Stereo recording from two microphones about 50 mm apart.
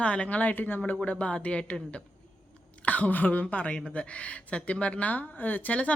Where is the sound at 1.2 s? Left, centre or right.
Left.